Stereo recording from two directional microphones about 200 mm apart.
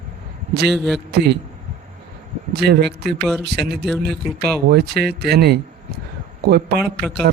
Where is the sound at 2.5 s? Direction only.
55° right (ahead or behind).